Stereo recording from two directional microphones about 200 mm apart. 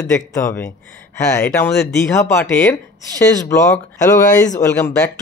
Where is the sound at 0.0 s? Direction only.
15° left (ahead or behind).